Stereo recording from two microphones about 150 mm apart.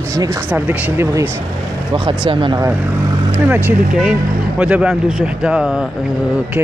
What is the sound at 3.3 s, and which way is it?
Speech, 10° right (ahead or behind).